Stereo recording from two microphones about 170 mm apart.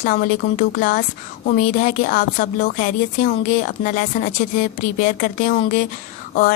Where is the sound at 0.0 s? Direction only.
55° left (ahead or behind).